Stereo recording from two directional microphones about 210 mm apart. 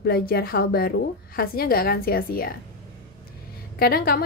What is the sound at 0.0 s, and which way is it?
A woman's voice, 45° left (ahead or behind).